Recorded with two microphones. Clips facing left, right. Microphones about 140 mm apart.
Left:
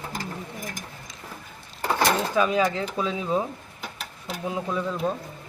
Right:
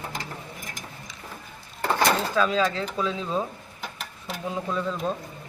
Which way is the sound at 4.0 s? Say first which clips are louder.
Left 2 dB; centre (ahead or behind).